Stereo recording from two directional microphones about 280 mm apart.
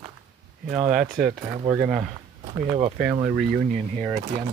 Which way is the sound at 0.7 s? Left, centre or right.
Centre.